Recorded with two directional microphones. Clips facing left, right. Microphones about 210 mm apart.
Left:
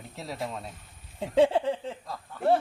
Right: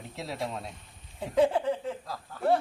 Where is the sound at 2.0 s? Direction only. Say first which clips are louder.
Even; centre (ahead or behind).